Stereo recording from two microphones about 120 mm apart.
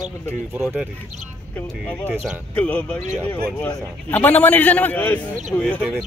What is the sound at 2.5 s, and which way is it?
A man's voice, 10° left (ahead or behind).